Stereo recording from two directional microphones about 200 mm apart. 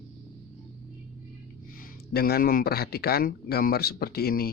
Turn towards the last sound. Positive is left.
turn(degrees=50)  # may be behind; listen again after turning